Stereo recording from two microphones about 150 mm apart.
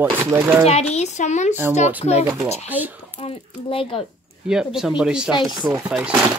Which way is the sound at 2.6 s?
10° right (ahead or behind).